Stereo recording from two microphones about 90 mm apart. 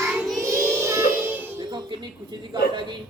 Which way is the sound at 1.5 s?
55° right (ahead or behind).